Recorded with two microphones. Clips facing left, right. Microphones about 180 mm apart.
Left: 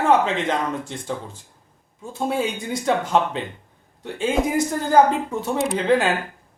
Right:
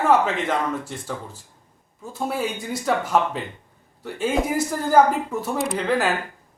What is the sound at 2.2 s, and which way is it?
Speech, 25° left (ahead or behind).